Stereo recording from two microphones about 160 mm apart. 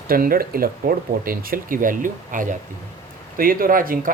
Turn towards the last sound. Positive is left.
turn(degrees=-60)  # may be behind; listen again after turning